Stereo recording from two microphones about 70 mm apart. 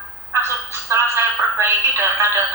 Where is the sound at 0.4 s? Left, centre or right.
Right.